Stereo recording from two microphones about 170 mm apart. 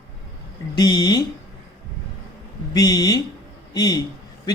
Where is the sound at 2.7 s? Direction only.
20° left (ahead or behind).